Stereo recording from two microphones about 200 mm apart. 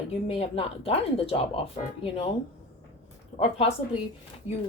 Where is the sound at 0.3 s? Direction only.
30° left (ahead or behind).